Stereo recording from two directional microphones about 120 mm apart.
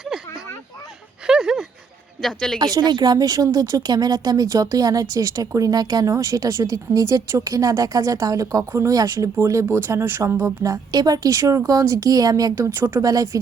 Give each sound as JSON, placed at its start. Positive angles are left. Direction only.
{"t": 1.3, "sound": "a sound", "side_deg": -5}
{"t": 2.2, "sound": "speech", "side_deg": 5}
{"t": 2.7, "sound": "speech", "side_deg": -35}